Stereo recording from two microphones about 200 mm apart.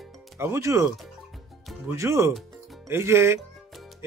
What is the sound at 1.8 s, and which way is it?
Speech, 15° right (ahead or behind).